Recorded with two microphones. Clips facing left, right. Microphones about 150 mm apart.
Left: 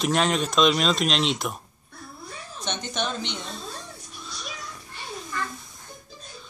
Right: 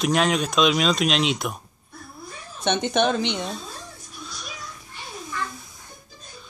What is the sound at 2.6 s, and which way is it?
Speech, 60° right (ahead or behind).